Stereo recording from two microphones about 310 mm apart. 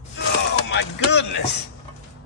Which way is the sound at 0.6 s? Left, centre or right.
Left.